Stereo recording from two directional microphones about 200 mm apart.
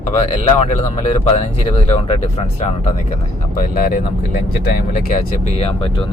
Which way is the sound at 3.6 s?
45° left (ahead or behind).